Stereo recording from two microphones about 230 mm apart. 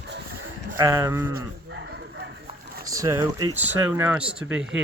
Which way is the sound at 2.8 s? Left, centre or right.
Centre.